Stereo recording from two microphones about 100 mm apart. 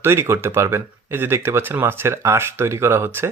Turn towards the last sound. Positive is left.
turn(degrees=-25)  # may be behind; listen again after turning